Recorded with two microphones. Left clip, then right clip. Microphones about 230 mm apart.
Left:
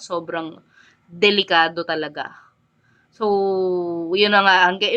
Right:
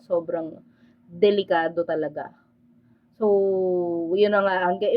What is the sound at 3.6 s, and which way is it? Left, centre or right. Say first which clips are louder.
Speech: left 2 dB; left.